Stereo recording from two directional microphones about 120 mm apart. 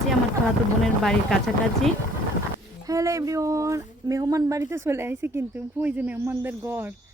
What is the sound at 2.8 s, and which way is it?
Speech, 25° right (ahead or behind).